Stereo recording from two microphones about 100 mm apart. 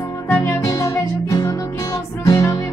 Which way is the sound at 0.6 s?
35° left (ahead or behind).